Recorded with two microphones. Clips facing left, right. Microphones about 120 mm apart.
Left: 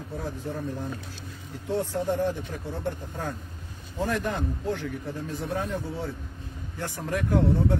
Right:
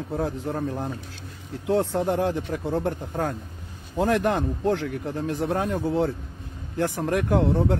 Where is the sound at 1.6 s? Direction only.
75° right (ahead or behind).